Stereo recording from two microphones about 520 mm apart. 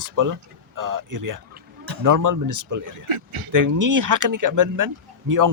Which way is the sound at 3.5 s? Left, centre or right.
Right.